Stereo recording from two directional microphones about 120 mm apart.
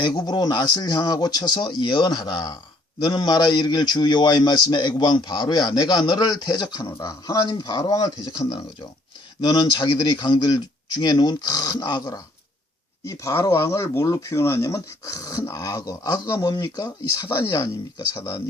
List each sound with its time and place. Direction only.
0.0 s a man's voice: 35° left (ahead or behind)